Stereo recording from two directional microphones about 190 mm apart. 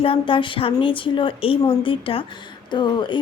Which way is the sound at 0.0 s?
25° left (ahead or behind).